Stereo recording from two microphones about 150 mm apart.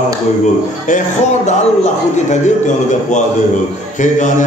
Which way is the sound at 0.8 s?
55° left (ahead or behind).